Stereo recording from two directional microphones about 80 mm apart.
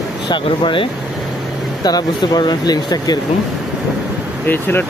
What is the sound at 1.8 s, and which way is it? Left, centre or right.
Speech, left.